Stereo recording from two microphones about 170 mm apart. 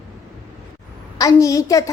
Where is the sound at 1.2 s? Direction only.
20° left (ahead or behind).